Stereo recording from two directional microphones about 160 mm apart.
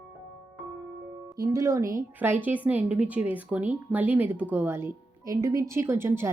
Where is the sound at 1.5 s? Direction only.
20° right (ahead or behind).